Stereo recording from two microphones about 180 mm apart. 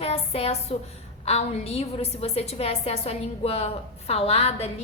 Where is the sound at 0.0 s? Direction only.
35° left (ahead or behind).